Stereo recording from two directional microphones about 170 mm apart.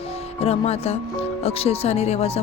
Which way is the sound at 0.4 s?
40° left (ahead or behind).